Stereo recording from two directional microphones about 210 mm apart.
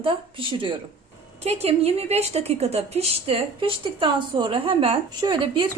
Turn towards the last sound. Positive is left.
turn(degrees=-20)  # may be behind; listen again after turning